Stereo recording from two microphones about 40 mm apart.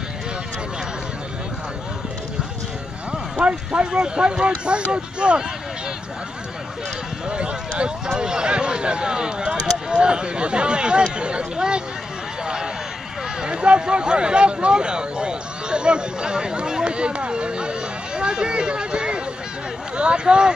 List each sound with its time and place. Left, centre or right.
3.4 s speech: right
7.2 s speech: right
13.4 s speech: right